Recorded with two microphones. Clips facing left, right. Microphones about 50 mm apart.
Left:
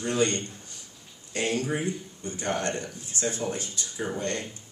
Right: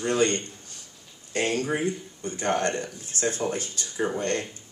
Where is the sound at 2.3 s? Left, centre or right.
Right.